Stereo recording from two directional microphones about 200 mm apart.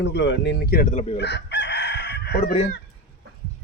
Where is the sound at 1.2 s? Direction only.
60° left (ahead or behind).